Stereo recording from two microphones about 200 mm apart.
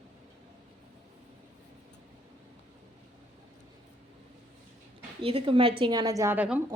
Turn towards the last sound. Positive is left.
turn(degrees=-5)  # may be behind; listen again after turning